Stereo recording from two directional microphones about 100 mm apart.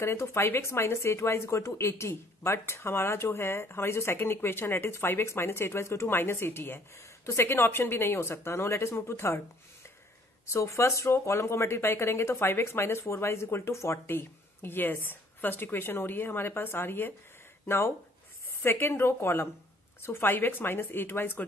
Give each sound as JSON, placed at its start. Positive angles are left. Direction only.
{"t": 0.0, "sound": "a woman's voice", "side_deg": 25}
{"t": 10.4, "sound": "a woman's voice", "side_deg": 30}